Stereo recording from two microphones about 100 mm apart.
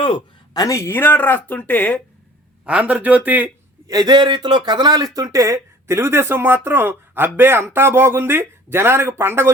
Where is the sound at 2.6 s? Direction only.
15° right (ahead or behind).